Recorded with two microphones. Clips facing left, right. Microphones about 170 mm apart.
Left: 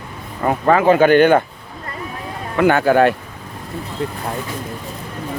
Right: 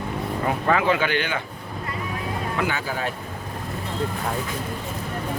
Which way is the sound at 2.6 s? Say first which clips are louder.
Left 17 dB; 60° left (ahead or behind).